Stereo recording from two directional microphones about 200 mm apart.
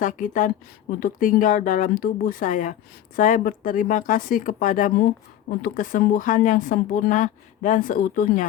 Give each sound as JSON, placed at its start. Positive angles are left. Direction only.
{"t": 0.0, "sound": "speech", "side_deg": 40}